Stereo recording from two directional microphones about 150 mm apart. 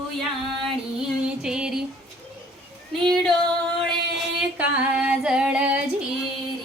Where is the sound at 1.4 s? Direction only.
5° right (ahead or behind).